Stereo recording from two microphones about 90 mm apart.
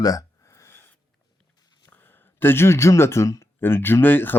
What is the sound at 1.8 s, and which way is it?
Speech, 20° left (ahead or behind).